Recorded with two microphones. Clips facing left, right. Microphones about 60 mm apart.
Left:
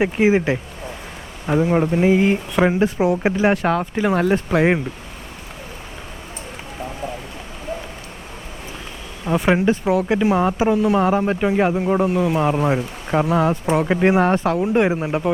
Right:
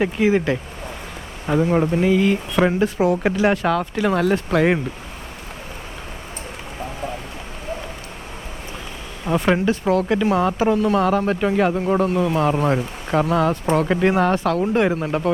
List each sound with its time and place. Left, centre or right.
0.0 s speech: centre
1.5 s speech: centre
2.0 s speech: left
2.6 s speech: centre
3.0 s speech: centre
3.5 s speech: left; by 4.8 s centre
9.2 s speech: centre; by 14.6 s left
14.6 s speech: centre